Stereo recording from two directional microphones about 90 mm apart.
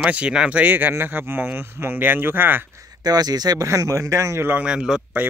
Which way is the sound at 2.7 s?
45° right (ahead or behind).